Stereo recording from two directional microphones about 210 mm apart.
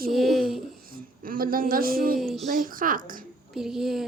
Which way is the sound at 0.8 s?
45° right (ahead or behind).